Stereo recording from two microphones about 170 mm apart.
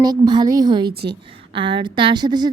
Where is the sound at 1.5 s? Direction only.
30° right (ahead or behind).